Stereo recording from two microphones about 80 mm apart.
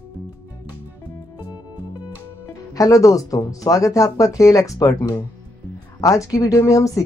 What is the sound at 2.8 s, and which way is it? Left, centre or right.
Speech, left.